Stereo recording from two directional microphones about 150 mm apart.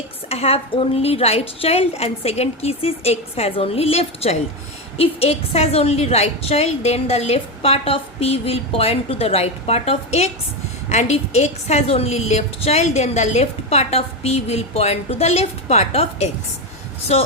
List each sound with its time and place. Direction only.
0.3 s a woman's voice: 40° left (ahead or behind)